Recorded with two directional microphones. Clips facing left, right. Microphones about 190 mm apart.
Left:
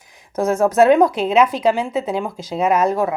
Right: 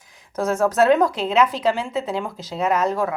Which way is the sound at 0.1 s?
10° left (ahead or behind).